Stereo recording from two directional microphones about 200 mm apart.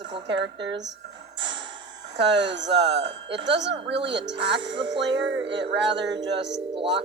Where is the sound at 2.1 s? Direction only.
60° right (ahead or behind).